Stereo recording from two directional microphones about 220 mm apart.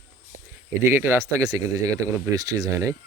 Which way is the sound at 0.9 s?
10° right (ahead or behind).